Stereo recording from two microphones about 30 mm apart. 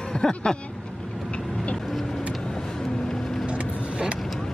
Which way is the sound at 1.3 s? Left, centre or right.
Left.